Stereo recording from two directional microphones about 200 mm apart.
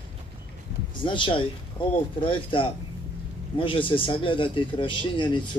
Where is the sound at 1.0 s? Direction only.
25° left (ahead or behind).